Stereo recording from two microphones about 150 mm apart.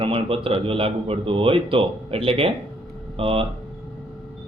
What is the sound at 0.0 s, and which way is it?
A man's voice, 35° right (ahead or behind).